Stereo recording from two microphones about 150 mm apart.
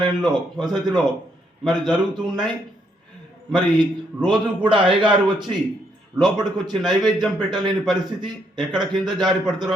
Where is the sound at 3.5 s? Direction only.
Centre (ahead or behind).